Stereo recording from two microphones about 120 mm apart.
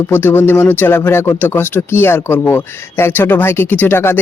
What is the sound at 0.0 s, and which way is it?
A man's voice, 20° left (ahead or behind).